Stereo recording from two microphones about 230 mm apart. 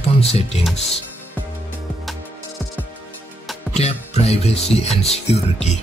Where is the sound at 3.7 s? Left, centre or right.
Left.